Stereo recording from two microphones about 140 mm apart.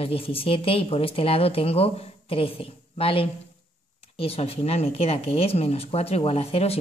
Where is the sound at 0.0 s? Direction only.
40° left (ahead or behind).